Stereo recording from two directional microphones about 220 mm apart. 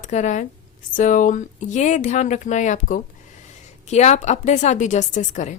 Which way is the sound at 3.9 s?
30° left (ahead or behind).